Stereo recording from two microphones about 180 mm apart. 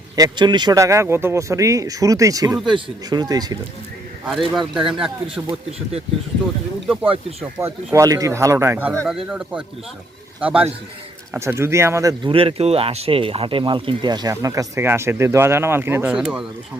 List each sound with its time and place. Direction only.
0.2 s speech: 25° right (ahead or behind)
4.3 s speech: centre (ahead or behind)
6.8 s speech: 5° right (ahead or behind)
9.0 s speech: 5° right (ahead or behind)
12.3 s speech: 30° right (ahead or behind); by 16.4 s 10° right (ahead or behind)